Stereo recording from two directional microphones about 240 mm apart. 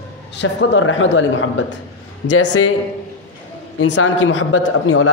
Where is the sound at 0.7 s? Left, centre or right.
Left.